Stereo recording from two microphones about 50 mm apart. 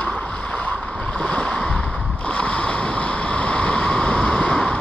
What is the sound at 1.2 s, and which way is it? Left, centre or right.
Waves, left.